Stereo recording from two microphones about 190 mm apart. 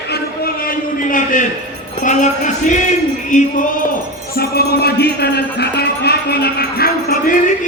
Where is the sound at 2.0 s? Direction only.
40° left (ahead or behind).